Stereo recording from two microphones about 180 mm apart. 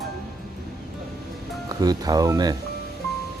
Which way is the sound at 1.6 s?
20° right (ahead or behind).